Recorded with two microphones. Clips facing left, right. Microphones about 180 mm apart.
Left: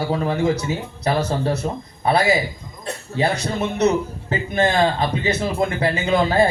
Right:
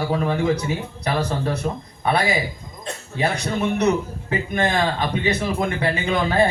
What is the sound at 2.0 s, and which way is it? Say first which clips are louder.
Speech: left 3 dB; 35° left (ahead or behind).